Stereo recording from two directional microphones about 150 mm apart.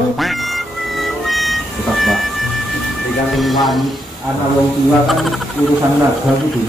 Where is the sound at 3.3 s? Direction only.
Centre (ahead or behind).